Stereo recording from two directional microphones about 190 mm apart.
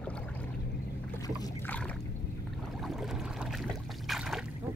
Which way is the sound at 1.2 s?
20° left (ahead or behind).